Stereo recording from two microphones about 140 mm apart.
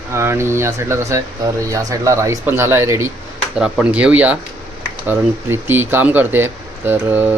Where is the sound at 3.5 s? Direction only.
5° right (ahead or behind).